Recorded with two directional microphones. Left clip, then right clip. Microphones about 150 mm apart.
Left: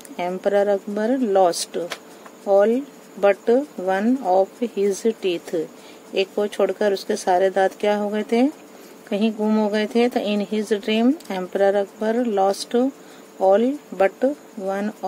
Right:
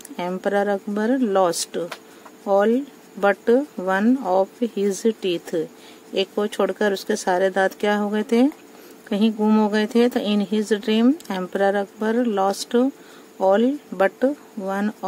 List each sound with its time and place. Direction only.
0.1 s speech: 45° right (ahead or behind)